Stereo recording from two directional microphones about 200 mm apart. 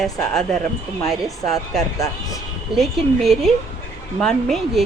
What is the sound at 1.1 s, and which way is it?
A woman's voice, centre (ahead or behind).